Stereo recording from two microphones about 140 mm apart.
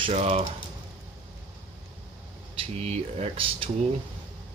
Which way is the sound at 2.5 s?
50° right (ahead or behind).